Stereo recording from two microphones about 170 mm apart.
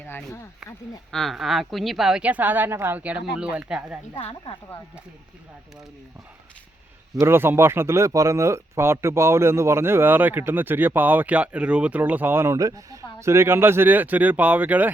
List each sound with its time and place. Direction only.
0.0 s a woman's voice: 10° left (ahead or behind)
4.2 s speech: 35° left (ahead or behind)
7.2 s speech: 15° right (ahead or behind)